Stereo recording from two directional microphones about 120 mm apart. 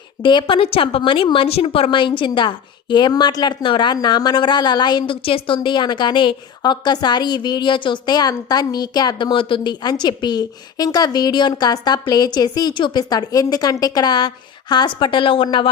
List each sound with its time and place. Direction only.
0.2 s a woman's voice: 40° left (ahead or behind)